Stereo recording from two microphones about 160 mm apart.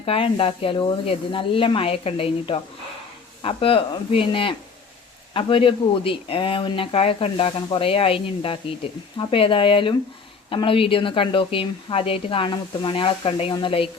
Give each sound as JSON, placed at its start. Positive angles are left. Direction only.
{"t": 0.0, "sound": "a woman's voice", "side_deg": 35}